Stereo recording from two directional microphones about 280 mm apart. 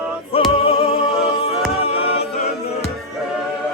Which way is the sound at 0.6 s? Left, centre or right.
Centre.